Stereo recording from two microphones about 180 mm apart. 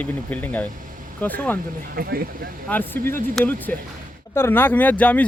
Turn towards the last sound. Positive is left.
turn(degrees=10)  # may be behind; listen again after turning